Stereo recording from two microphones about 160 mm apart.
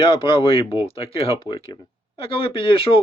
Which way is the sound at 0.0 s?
35° left (ahead or behind).